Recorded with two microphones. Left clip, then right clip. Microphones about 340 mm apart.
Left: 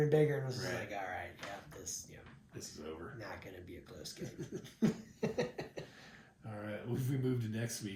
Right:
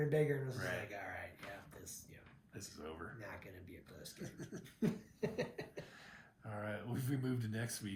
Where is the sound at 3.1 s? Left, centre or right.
Centre.